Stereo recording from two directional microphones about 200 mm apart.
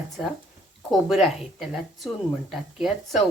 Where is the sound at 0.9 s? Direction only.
Centre (ahead or behind).